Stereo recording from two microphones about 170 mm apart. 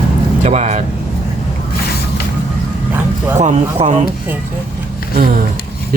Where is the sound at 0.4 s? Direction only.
40° right (ahead or behind).